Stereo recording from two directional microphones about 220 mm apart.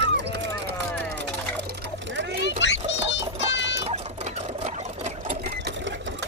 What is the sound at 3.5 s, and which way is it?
Patter, 55° left (ahead or behind).